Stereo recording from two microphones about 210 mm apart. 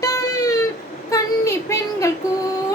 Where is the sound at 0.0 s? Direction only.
15° left (ahead or behind).